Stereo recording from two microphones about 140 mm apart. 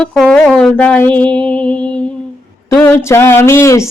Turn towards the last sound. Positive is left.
turn(degrees=20)  # may be behind; listen again after turning